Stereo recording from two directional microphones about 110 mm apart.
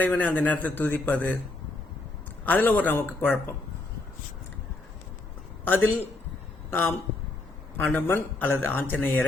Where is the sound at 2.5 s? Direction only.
15° left (ahead or behind).